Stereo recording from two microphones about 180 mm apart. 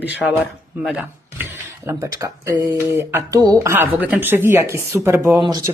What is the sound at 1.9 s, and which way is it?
Speech, 15° right (ahead or behind).